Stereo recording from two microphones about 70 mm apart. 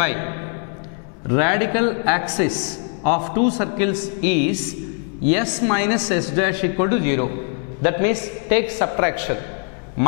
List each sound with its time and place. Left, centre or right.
0.0 s a man's voice: centre